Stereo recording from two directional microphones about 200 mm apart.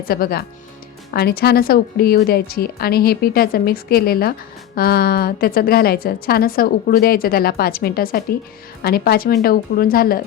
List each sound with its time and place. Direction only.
0.0 s a woman's voice: 50° left (ahead or behind)